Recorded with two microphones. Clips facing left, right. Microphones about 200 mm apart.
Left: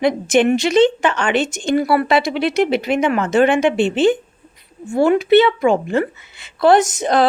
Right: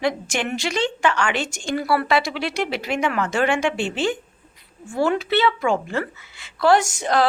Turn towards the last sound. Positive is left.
turn(degrees=20)  # may be behind; listen again after turning